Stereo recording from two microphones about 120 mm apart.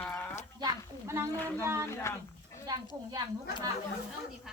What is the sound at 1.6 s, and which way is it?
Speech, 20° right (ahead or behind).